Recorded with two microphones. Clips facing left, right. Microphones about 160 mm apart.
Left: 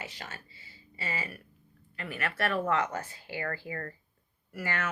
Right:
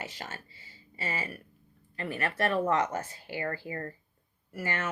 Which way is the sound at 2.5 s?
25° right (ahead or behind).